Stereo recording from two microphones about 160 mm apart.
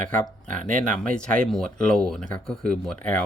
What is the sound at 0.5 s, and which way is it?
Speech, 50° right (ahead or behind).